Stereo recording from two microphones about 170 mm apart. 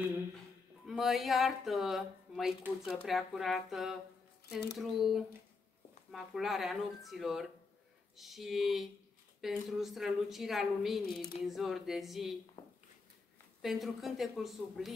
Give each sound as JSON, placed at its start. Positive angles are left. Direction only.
{"t": 0.8, "sound": "speech", "side_deg": 0}
{"t": 13.6, "sound": "speech", "side_deg": 0}